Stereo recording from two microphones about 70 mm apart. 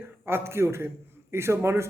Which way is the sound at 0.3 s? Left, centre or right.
Right.